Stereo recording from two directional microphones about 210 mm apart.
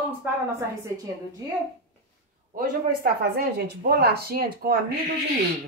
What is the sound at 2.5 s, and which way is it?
Speech, 45° right (ahead or behind).